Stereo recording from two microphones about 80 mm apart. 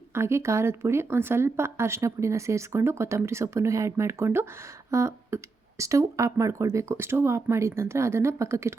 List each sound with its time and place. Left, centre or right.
0.1 s speech: right